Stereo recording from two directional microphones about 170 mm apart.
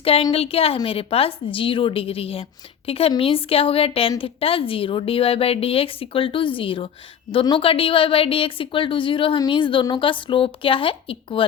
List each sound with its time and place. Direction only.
0.0 s a woman's voice: 35° left (ahead or behind)